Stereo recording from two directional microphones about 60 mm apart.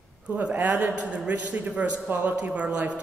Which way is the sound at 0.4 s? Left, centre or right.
Right.